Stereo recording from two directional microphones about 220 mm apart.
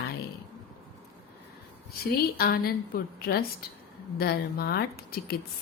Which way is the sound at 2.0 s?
45° left (ahead or behind).